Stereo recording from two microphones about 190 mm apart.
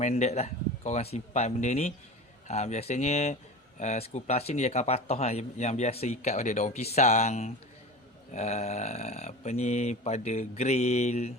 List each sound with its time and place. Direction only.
0.0 s speech: 35° left (ahead or behind)